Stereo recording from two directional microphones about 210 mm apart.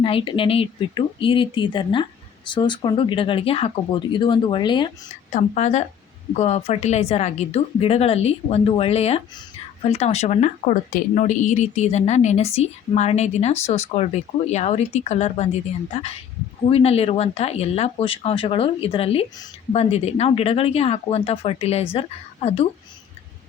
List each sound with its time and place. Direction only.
0.0 s speech: 25° left (ahead or behind)
5.3 s speech: 35° left (ahead or behind)